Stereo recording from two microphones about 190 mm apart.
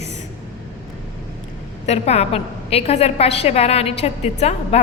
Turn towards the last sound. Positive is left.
turn(degrees=35)  # may be behind; listen again after turning